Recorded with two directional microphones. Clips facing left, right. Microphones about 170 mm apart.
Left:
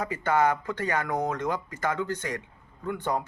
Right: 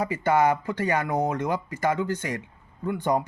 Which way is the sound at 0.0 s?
10° right (ahead or behind).